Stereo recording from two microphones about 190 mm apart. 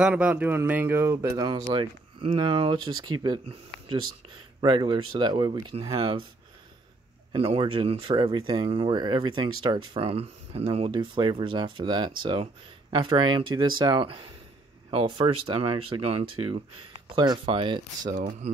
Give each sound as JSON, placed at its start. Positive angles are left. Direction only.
{"t": 0.0, "sound": "speech", "side_deg": -5}
{"t": 7.3, "sound": "speech", "side_deg": -30}